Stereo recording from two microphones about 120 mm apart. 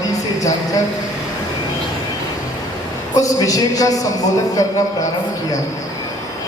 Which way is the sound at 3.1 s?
30° left (ahead or behind).